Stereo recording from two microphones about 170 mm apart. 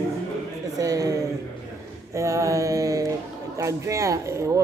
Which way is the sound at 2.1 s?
20° right (ahead or behind).